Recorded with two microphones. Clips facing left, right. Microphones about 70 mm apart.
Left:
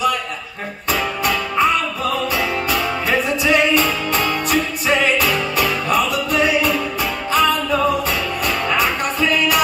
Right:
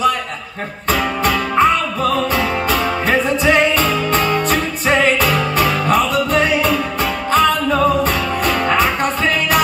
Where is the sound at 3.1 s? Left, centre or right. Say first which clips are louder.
Right 2 dB; right.